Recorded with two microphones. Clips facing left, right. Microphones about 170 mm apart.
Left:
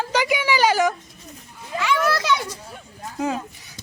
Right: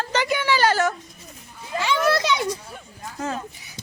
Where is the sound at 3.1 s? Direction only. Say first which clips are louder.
Left 4 dB; 10° left (ahead or behind).